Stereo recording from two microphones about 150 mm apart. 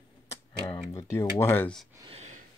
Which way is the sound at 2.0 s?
50° right (ahead or behind).